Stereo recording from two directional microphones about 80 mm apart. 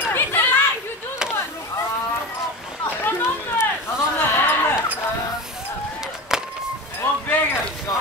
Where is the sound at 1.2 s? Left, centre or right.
Centre.